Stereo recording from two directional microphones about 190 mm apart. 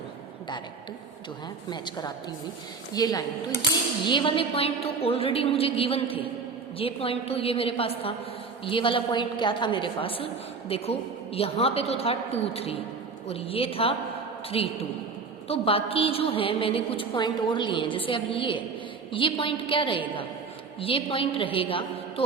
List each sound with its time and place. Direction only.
1.7 s a woman's voice: 20° left (ahead or behind)